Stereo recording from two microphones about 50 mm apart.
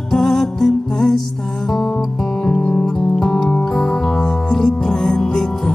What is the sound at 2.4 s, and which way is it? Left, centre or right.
Music, left.